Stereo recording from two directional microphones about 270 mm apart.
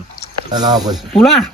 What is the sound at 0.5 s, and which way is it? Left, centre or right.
Speech, centre.